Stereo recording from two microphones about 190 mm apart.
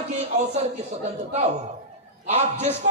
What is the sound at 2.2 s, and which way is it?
Speech, 35° right (ahead or behind).